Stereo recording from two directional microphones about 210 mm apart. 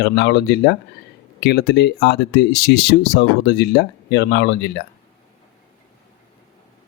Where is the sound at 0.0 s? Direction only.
55° left (ahead or behind).